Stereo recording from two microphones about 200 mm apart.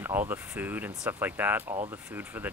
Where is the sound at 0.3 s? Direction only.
10° right (ahead or behind).